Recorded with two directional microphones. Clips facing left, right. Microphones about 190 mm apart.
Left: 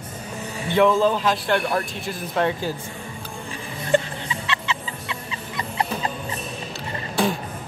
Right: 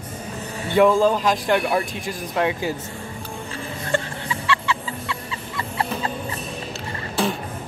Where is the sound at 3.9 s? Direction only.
20° left (ahead or behind).